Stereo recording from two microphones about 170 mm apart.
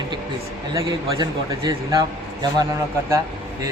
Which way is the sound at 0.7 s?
20° right (ahead or behind).